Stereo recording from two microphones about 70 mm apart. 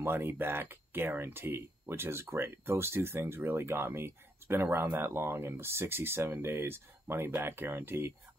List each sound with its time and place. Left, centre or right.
0.0 s speech: right